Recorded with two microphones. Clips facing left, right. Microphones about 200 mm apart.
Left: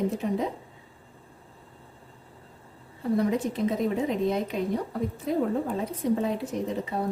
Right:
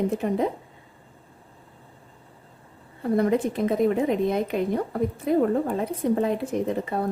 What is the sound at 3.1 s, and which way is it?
A woman's voice, 55° right (ahead or behind).